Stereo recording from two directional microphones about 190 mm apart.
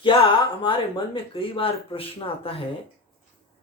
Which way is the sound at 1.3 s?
30° left (ahead or behind).